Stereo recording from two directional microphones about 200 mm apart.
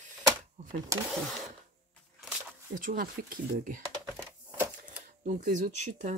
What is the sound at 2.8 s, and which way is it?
Speech, 45° right (ahead or behind).